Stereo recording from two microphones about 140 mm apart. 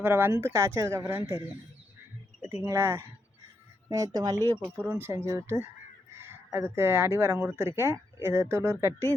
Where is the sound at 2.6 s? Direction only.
20° right (ahead or behind).